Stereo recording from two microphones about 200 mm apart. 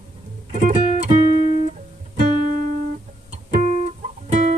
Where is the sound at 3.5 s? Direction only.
35° right (ahead or behind).